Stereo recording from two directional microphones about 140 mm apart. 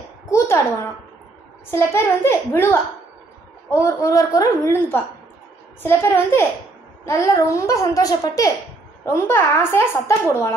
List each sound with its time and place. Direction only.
1.7 s a child's voice: 20° left (ahead or behind)